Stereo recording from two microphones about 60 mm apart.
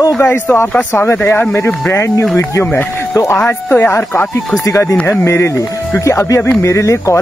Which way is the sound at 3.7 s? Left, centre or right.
Left.